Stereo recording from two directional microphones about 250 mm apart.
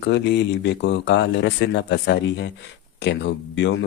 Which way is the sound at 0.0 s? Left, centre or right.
Left.